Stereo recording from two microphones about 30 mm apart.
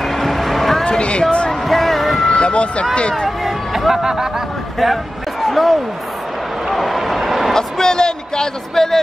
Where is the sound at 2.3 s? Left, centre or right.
Left.